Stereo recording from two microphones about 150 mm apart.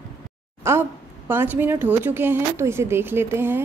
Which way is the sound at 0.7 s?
15° right (ahead or behind).